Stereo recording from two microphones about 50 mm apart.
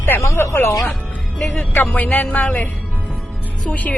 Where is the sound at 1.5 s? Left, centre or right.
Left.